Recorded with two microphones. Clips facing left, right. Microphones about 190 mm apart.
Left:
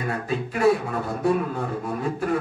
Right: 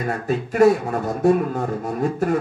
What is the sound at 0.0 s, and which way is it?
Speech, 45° right (ahead or behind).